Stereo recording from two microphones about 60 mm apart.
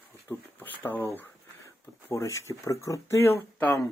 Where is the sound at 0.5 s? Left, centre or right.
Left.